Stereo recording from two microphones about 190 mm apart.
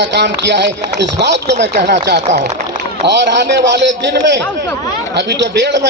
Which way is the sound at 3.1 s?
65° right (ahead or behind).